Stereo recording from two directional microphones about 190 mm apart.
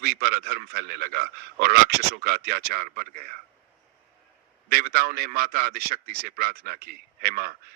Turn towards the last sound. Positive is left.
turn(degrees=-55)  # may be behind; listen again after turning